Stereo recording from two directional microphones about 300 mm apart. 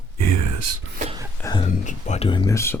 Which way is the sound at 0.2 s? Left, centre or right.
Right.